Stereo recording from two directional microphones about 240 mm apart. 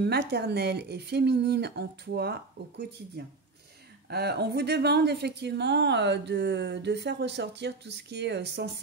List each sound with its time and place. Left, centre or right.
0.0 s speech: right
4.1 s speech: right